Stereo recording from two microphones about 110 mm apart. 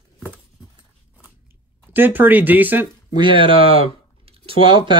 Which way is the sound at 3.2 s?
50° right (ahead or behind).